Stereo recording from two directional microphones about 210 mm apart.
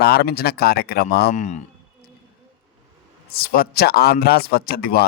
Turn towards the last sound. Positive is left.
turn(degrees=45)  # may be behind; listen again after turning